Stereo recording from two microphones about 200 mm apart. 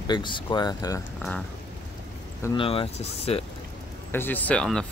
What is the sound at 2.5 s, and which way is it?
Speech, 25° left (ahead or behind).